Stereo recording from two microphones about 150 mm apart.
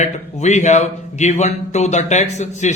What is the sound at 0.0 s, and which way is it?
A man's voice, 50° left (ahead or behind).